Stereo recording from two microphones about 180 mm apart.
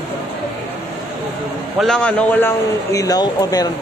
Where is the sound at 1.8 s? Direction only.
5° left (ahead or behind).